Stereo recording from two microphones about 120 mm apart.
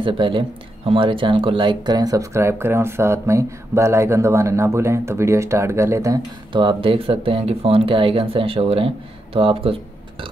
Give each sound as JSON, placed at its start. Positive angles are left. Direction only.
{"t": 0.0, "sound": "speech", "side_deg": -45}
{"t": 6.5, "sound": "speech", "side_deg": -45}